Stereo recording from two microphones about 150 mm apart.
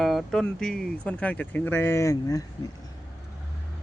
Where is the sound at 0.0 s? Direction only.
Centre (ahead or behind); by 2.4 s 20° left (ahead or behind).